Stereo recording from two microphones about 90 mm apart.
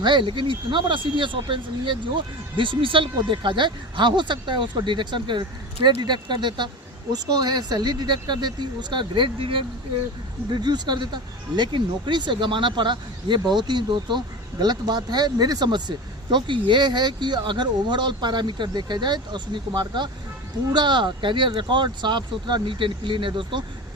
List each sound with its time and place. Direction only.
0.0 s speech: 60° right (ahead or behind); by 9.6 s 80° right
10.5 s speech: 55° right (ahead or behind); by 23.6 s 70° right (ahead or behind)